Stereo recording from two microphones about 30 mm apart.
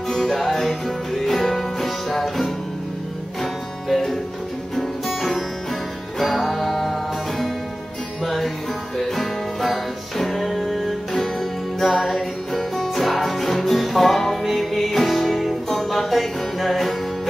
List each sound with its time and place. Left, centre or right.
0.1 s music: centre
3.9 s music: centre
8.9 s music: centre
9.2 s music: centre